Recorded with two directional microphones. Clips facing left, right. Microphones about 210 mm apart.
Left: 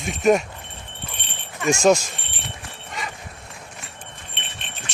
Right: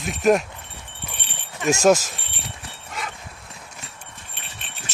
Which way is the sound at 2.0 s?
Centre (ahead or behind).